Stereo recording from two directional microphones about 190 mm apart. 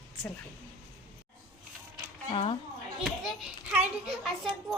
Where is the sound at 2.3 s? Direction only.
30° left (ahead or behind).